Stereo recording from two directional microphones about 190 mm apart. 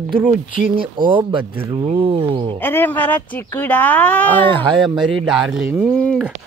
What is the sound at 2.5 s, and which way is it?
Speech, 10° left (ahead or behind).